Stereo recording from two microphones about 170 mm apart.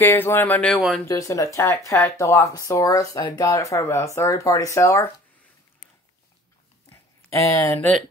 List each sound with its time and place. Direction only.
0.0 s speech: 10° left (ahead or behind)
1.0 s speech: 20° left (ahead or behind)
6.9 s a sound: 15° left (ahead or behind)